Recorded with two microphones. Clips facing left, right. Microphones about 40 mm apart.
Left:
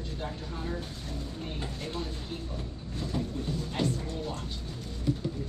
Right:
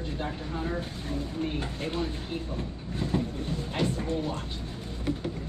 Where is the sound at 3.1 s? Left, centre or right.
Right.